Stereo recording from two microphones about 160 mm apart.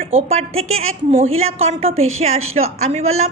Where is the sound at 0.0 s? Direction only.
40° right (ahead or behind).